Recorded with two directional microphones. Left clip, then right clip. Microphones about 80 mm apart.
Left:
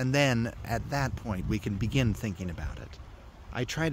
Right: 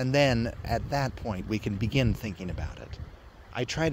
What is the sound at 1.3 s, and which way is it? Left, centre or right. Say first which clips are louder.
Speech: right 2 dB; left.